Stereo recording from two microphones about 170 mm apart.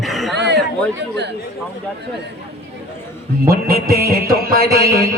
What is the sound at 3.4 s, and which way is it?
A man's voice, 60° right (ahead or behind).